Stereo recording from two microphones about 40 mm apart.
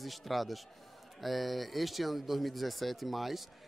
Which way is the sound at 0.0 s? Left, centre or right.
Centre.